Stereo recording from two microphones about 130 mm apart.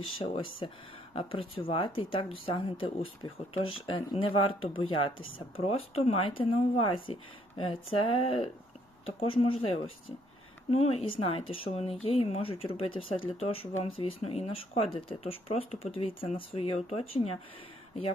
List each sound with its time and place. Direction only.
0.2 s speech: 40° left (ahead or behind)